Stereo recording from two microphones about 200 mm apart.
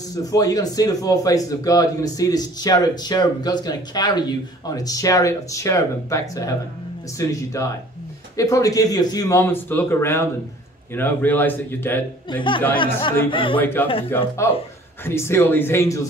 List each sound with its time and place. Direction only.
0.2 s speech: 20° left (ahead or behind)
12.7 s speech: 25° left (ahead or behind)
13.8 s speech: 10° left (ahead or behind)